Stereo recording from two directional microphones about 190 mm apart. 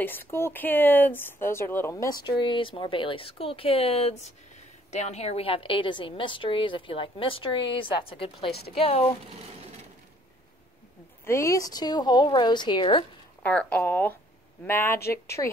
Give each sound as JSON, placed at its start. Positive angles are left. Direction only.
{"t": 0.0, "sound": "a woman's voice", "side_deg": 10}
{"t": 8.5, "sound": "a woman's voice", "side_deg": 55}
{"t": 8.7, "sound": "speech", "side_deg": 30}
{"t": 11.2, "sound": "a woman's voice", "side_deg": 15}
{"t": 13.4, "sound": "speech", "side_deg": 5}